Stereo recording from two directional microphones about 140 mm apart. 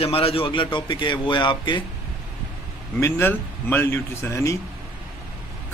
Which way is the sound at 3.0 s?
15° left (ahead or behind).